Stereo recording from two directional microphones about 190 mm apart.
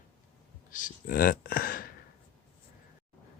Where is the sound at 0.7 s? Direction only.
45° left (ahead or behind).